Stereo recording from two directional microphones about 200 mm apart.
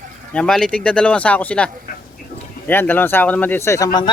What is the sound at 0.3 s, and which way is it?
Speech, 5° left (ahead or behind).